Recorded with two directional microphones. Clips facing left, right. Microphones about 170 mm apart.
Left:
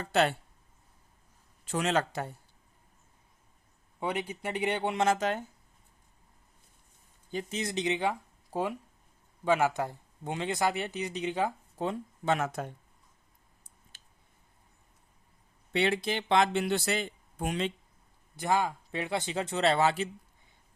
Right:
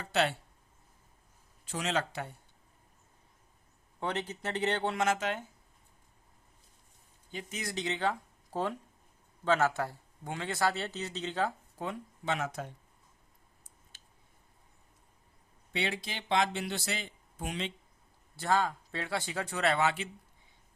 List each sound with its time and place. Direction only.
0.0 s speech: 50° left (ahead or behind)
1.6 s speech: 55° left (ahead or behind)
4.0 s speech: 10° left (ahead or behind)
4.9 s speech: 35° left (ahead or behind)
7.5 s speech: 20° left (ahead or behind)
12.2 s speech: 50° left (ahead or behind)
15.7 s speech: 55° left (ahead or behind)
18.3 s speech: 15° left (ahead or behind); by 20.1 s 35° left (ahead or behind)